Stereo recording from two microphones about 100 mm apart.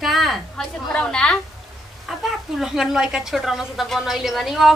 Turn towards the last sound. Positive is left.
turn(degrees=0)  # may be behind; listen again after turning